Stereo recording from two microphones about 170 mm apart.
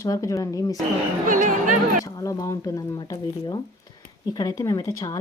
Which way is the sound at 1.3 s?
50° right (ahead or behind).